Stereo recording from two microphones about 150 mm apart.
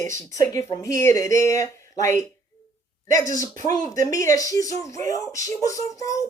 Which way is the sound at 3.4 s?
20° left (ahead or behind).